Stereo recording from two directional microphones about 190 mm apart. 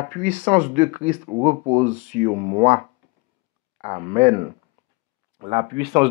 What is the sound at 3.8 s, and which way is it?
Speech, 35° right (ahead or behind).